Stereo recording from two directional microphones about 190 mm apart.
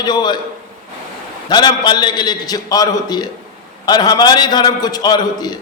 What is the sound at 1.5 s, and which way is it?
A man's voice, 25° left (ahead or behind).